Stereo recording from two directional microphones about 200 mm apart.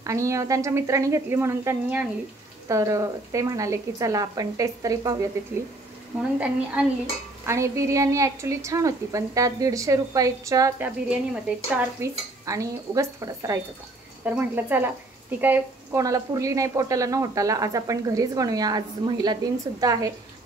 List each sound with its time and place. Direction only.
0.0 s speech: 15° right (ahead or behind)
6.1 s a woman's voice: 5° right (ahead or behind)